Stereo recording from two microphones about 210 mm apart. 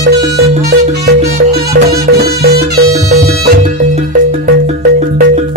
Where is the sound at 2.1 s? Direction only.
50° right (ahead or behind).